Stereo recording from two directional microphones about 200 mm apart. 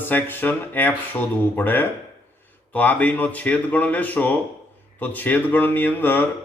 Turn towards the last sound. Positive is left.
turn(degrees=10)  # may be behind; listen again after turning